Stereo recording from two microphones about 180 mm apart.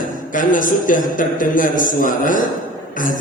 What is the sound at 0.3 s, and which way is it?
A man's voice, 50° left (ahead or behind).